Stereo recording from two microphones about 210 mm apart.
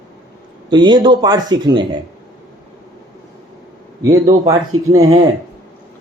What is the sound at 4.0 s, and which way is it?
Speech, 15° right (ahead or behind).